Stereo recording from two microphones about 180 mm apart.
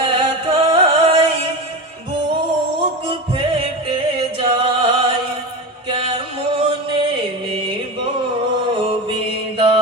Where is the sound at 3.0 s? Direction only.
30° right (ahead or behind).